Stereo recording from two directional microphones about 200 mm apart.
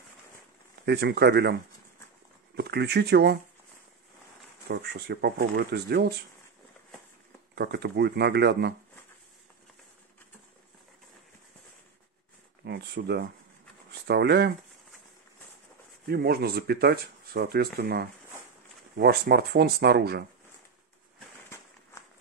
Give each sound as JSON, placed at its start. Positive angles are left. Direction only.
{"t": 0.8, "sound": "speech", "side_deg": -55}
{"t": 4.6, "sound": "speech", "side_deg": -55}
{"t": 7.5, "sound": "speech", "side_deg": -55}
{"t": 12.6, "sound": "speech", "side_deg": -55}
{"t": 16.1, "sound": "speech", "side_deg": -50}